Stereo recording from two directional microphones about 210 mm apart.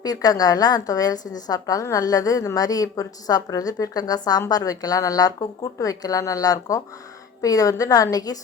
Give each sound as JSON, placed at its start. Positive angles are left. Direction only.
{"t": 0.0, "sound": "a woman's voice", "side_deg": 20}